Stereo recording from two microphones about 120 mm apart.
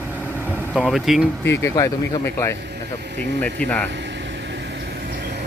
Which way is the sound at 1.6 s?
25° left (ahead or behind).